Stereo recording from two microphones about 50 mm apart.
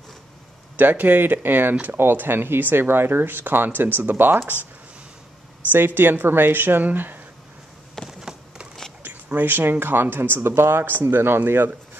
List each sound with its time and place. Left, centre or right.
0.7 s speech: right
5.7 s a woman's voice: right
8.1 s a sound: centre
9.0 s speech: right